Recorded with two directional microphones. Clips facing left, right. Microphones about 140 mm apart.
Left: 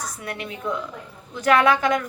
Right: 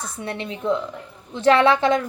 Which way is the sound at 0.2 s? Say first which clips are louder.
Right 8 dB; 25° right (ahead or behind).